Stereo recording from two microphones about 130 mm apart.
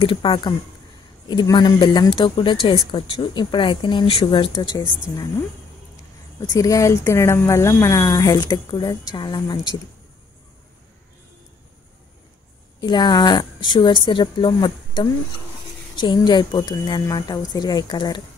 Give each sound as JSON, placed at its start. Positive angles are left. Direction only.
{"t": 0.0, "sound": "a woman's voice", "side_deg": 40}
{"t": 4.5, "sound": "speech", "side_deg": 25}
{"t": 6.5, "sound": "speech", "side_deg": 25}
{"t": 12.8, "sound": "a woman's voice", "side_deg": 35}